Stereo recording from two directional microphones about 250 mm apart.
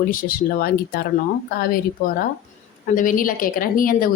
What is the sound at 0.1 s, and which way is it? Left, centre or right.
Speech, left.